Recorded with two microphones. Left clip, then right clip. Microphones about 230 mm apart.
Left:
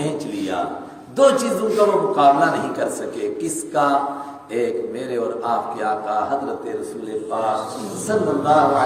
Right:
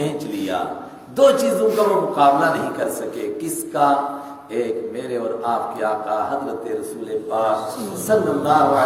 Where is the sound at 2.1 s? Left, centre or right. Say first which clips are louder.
Even; centre.